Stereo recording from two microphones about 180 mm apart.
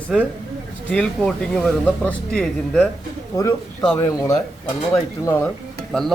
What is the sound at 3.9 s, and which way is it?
Speech, 15° left (ahead or behind).